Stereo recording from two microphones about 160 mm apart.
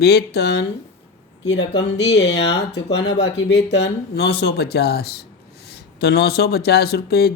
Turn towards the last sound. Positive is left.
turn(degrees=85)